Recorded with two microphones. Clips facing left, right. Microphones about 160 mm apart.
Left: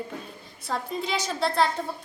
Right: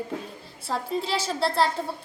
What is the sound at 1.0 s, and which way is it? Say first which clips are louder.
Speech: even; 30° right (ahead or behind).